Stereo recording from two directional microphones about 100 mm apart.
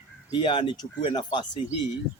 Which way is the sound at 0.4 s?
55° left (ahead or behind).